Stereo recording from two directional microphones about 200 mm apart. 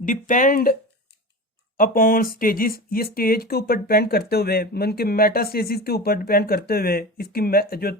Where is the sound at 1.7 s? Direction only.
45° left (ahead or behind).